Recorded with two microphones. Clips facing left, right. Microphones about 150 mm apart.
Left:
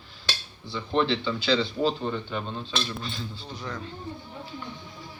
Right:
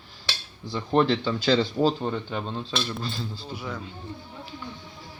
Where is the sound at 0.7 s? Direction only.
45° right (ahead or behind).